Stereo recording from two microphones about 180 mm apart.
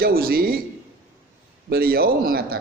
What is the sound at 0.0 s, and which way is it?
Speech, 55° right (ahead or behind).